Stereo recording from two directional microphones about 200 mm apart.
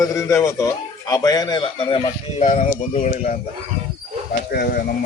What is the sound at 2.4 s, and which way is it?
Speech, 35° left (ahead or behind).